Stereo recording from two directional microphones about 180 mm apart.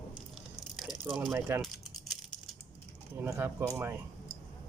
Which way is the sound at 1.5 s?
15° right (ahead or behind).